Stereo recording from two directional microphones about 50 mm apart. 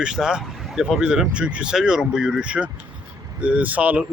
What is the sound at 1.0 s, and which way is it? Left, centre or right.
Speech, centre.